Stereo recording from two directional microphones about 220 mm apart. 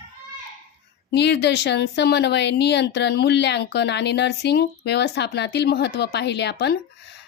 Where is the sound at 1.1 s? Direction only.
50° left (ahead or behind).